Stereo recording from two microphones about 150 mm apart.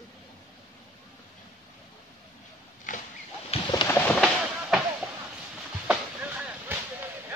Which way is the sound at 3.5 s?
40° left (ahead or behind).